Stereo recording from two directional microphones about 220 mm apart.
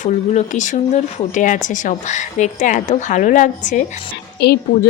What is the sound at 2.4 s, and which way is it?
Speech, 35° left (ahead or behind).